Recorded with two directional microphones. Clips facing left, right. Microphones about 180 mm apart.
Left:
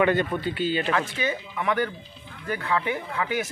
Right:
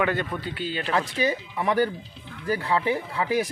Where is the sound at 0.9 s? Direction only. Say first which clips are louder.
Right 2 dB; 35° right (ahead or behind).